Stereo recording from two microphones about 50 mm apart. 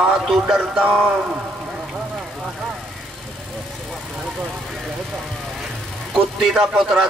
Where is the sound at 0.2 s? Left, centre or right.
Centre.